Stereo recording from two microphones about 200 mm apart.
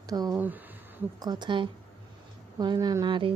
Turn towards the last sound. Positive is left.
turn(degrees=-25)  # may be behind; listen again after turning